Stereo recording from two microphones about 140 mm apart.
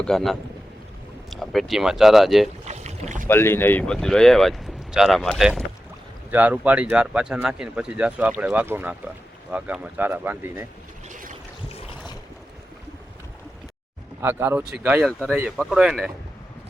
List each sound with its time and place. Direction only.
0.0 s speech: 5° left (ahead or behind)
2.6 s boat: 55° right (ahead or behind)
3.2 s speech: 15° left (ahead or behind); by 10.7 s 15° right (ahead or behind)
11.1 s boat: 65° right (ahead or behind)
11.7 s boat: 45° left (ahead or behind)
14.2 s speech: 15° right (ahead or behind)